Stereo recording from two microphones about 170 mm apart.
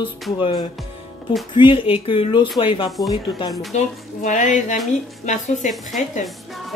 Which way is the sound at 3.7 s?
45° left (ahead or behind).